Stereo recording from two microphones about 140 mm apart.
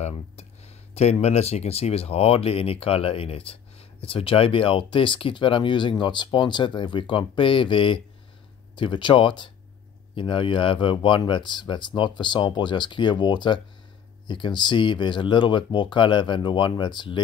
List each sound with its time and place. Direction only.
0.0 s speech: 50° left (ahead or behind); by 17.2 s 35° left (ahead or behind)